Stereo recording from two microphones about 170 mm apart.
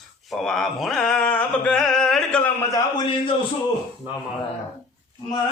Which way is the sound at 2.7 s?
25° left (ahead or behind).